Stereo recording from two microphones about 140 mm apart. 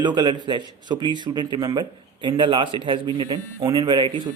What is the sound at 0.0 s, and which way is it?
A man's voice, 30° right (ahead or behind).